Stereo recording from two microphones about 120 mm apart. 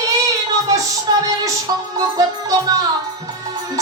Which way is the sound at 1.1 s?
40° right (ahead or behind).